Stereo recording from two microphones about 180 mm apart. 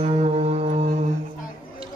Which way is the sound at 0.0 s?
35° right (ahead or behind).